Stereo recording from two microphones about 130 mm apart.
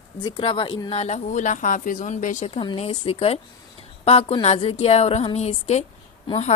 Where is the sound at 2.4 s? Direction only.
50° left (ahead or behind).